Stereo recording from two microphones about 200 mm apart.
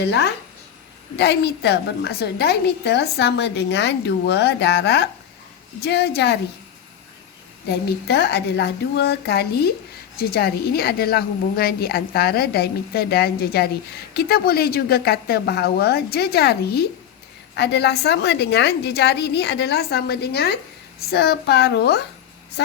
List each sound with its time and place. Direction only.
0.0 s a woman's voice: 60° left (ahead or behind)
7.7 s a woman's voice: 55° left (ahead or behind)